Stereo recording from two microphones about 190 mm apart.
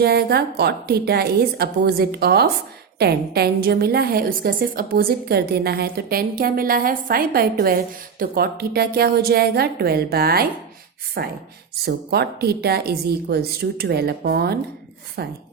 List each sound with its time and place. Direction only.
0.0 s a woman's voice: 55° right (ahead or behind)